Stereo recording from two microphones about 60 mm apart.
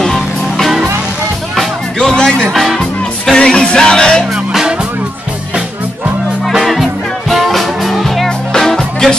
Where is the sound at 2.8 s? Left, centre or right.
Centre.